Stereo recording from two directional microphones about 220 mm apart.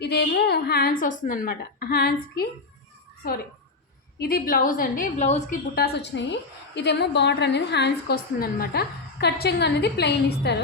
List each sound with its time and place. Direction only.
0.0 s a woman's voice: 45° left (ahead or behind)
4.2 s a woman's voice: 40° left (ahead or behind)